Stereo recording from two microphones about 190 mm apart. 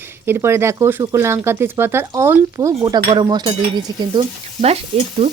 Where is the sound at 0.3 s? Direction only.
10° right (ahead or behind).